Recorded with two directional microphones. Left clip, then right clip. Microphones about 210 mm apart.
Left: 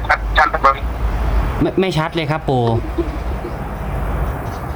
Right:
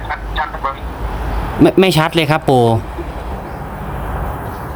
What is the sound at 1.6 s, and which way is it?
Speech, 20° right (ahead or behind).